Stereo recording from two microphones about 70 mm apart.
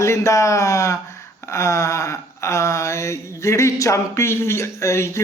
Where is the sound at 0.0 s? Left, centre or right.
Left.